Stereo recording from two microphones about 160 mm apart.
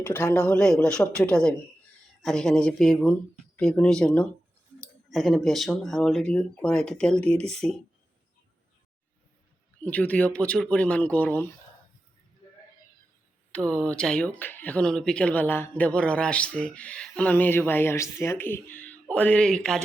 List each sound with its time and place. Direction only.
0.0 s speech: 15° left (ahead or behind)
0.4 s speech: 5° left (ahead or behind)
9.8 s speech: 10° left (ahead or behind)
13.5 s speech: 5° left (ahead or behind)